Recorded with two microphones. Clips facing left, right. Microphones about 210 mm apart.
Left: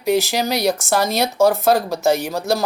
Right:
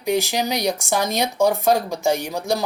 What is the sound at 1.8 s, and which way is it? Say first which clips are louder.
Speech: left 3 dB; 15° right (ahead or behind).